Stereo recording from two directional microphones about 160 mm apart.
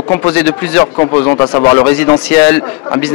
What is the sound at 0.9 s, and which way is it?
A man's voice, 25° left (ahead or behind).